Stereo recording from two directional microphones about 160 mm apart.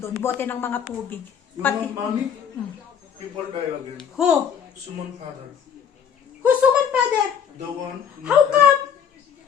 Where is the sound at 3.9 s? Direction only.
5° right (ahead or behind).